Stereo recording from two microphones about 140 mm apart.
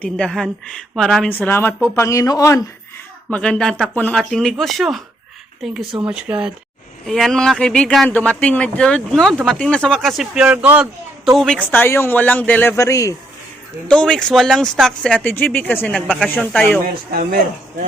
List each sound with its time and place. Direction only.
0.0 s a woman's voice: 5° left (ahead or behind); by 2.6 s 25° left (ahead or behind)
3.3 s speech: 5° left (ahead or behind)
7.0 s speech: centre (ahead or behind)
11.3 s a woman's voice: 5° left (ahead or behind); by 13.1 s 25° left (ahead or behind)
13.8 s a woman's voice: 5° left (ahead or behind)
16.8 s speech: 90° right